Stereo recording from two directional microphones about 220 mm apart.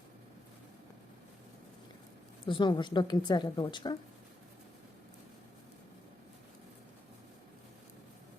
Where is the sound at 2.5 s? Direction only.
20° left (ahead or behind).